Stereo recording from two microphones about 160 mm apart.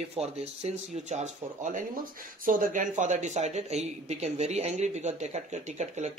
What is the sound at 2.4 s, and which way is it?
Speech, 60° right (ahead or behind).